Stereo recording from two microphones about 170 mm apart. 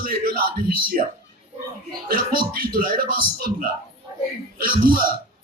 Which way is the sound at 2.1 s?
60° right (ahead or behind).